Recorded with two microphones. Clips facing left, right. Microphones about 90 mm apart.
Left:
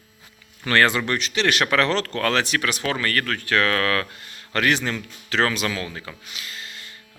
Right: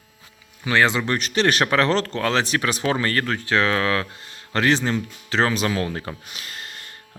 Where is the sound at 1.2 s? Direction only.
40° right (ahead or behind).